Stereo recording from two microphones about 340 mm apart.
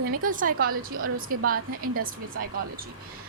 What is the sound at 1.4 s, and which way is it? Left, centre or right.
Speech, right.